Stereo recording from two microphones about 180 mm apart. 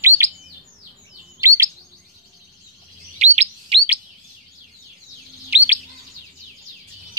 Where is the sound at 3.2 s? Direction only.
40° right (ahead or behind).